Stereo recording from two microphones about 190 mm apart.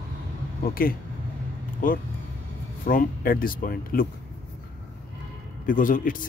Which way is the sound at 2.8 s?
45° left (ahead or behind).